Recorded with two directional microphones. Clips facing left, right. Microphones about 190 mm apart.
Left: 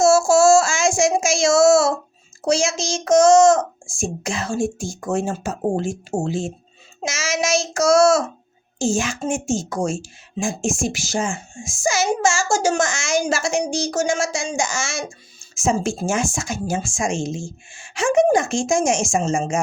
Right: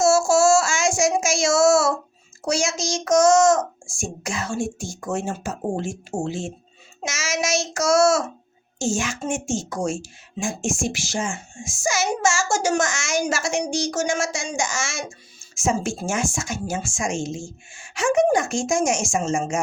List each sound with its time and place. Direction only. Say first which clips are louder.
0.0 s child singing: left 3 dB; 30° left (ahead or behind)
2.4 s a child's voice: left 4 dB; 30° left (ahead or behind)